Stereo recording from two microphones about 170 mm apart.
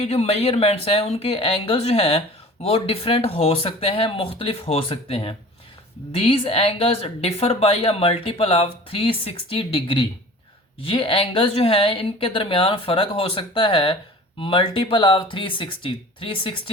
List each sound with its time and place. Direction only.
0.0 s a woman's voice: 40° left (ahead or behind)